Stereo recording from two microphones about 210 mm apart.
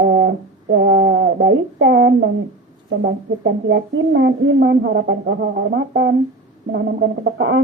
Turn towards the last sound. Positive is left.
turn(degrees=-60)  # may be behind; listen again after turning